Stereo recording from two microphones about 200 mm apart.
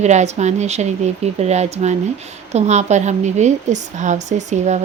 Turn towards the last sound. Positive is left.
turn(degrees=-35)  # may be behind; listen again after turning